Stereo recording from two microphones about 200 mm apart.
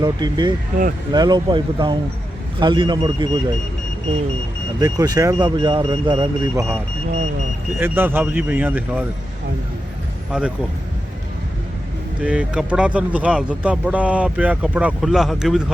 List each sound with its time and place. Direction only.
0.0 s speech: 20° right (ahead or behind)
4.8 s speech: 20° right (ahead or behind)
7.8 s speech: 10° right (ahead or behind)
10.3 s speech: 5° right (ahead or behind)
12.2 s speech: 5° right (ahead or behind)